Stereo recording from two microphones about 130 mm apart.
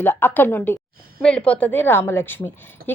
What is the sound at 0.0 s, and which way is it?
A woman's voice, 15° left (ahead or behind).